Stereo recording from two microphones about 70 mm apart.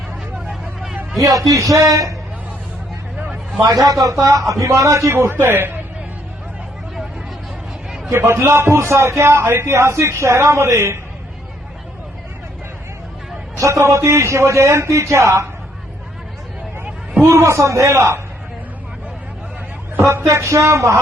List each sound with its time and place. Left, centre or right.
0.6 s hubbub: centre
1.2 s a man's voice: right
3.6 s a man's voice: right
8.1 s a man's voice: right
13.6 s a man's voice: right
17.2 s a man's voice: right
20.0 s a man's voice: right